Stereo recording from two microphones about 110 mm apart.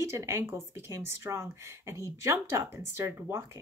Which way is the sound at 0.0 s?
25° right (ahead or behind).